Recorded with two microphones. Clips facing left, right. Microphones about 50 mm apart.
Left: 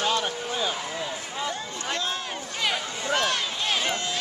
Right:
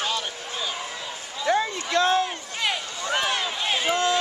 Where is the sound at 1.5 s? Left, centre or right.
Right.